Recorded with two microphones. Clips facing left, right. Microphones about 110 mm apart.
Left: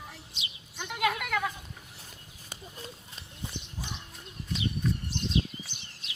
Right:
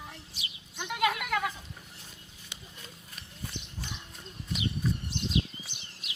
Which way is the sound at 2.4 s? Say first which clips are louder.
Left 6 dB; 30° left (ahead or behind).